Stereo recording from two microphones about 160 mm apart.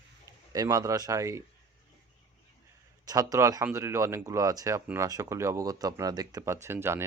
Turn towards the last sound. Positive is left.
turn(degrees=-15)  # may be behind; listen again after turning